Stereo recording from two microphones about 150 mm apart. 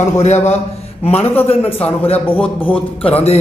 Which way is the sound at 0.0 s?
50° left (ahead or behind).